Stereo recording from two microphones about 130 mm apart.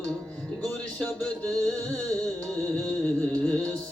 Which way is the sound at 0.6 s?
10° left (ahead or behind).